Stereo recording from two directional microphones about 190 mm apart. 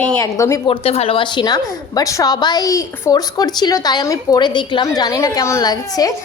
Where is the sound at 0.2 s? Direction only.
15° left (ahead or behind).